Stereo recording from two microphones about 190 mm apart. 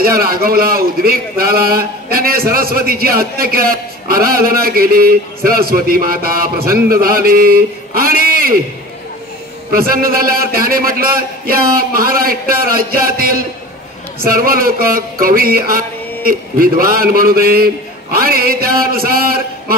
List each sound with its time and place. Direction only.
0.0 s a man's voice: 50° right (ahead or behind)
9.8 s a man's voice: 50° right (ahead or behind)